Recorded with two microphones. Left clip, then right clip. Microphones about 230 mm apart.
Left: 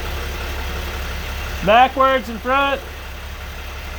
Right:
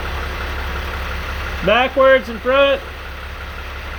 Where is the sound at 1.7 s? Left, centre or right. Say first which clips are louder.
Right 1 dB; left.